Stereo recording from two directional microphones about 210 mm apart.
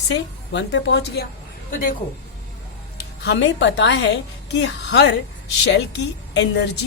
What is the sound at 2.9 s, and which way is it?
A woman's voice, 50° left (ahead or behind).